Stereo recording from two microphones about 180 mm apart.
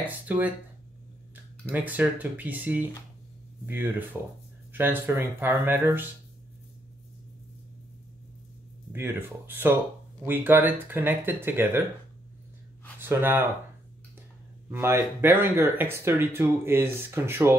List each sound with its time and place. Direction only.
0.3 s speech: 10° right (ahead or behind)
8.9 s speech: 10° right (ahead or behind)
13.0 s speech: 10° right (ahead or behind)
14.7 s speech: 15° right (ahead or behind)